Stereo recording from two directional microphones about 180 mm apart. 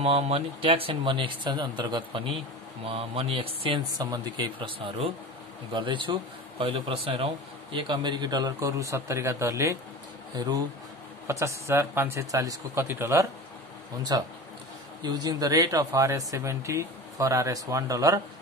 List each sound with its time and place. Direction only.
0.0 s a man's voice: 35° right (ahead or behind); by 18.2 s 20° right (ahead or behind)